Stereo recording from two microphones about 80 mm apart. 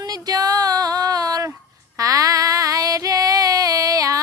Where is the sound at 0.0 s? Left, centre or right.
Right.